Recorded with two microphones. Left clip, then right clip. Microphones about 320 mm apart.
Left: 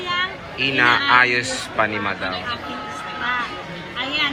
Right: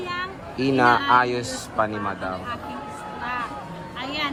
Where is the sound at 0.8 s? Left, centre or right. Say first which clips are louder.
Left 3 dB; centre.